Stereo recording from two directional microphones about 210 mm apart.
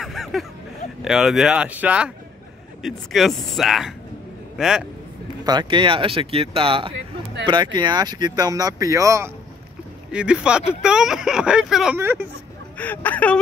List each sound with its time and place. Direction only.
0.0 s a sound: centre (ahead or behind)
1.0 s speech: centre (ahead or behind)
5.4 s speech: 20° right (ahead or behind)
12.7 s speech: 5° left (ahead or behind)